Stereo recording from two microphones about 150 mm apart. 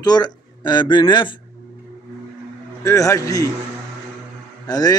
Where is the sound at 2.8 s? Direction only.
20° left (ahead or behind).